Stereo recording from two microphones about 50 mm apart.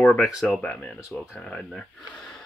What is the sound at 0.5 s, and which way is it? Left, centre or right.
Speech, left.